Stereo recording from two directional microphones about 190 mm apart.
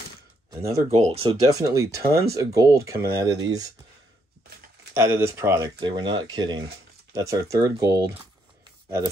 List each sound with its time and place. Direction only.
0.5 s speech: 15° right (ahead or behind)
0.9 s speech: 35° right (ahead or behind)
1.3 s speech: 20° right (ahead or behind)
4.9 s speech: 15° right (ahead or behind)